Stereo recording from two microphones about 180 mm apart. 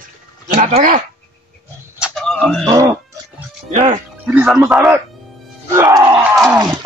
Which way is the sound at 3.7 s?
40° right (ahead or behind).